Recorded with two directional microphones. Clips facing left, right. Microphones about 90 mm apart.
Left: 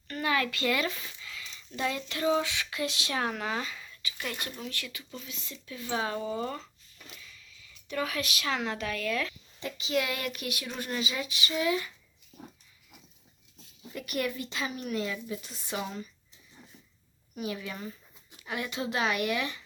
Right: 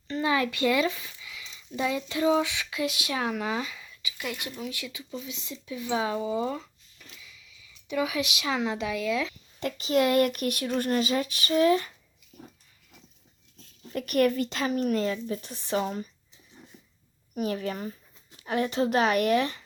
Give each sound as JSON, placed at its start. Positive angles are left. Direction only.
{"t": 0.1, "sound": "speech", "side_deg": -20}
{"t": 9.3, "sound": "speech", "side_deg": -50}
{"t": 12.3, "sound": "pig", "side_deg": 30}
{"t": 13.9, "sound": "speech", "side_deg": -55}
{"t": 16.6, "sound": "a sound", "side_deg": -5}
{"t": 17.3, "sound": "speech", "side_deg": -45}